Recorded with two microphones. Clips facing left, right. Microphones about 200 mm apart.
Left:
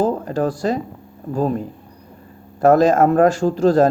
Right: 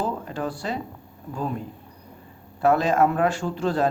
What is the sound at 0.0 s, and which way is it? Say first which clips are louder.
Speech: left 9 dB; 45° left (ahead or behind).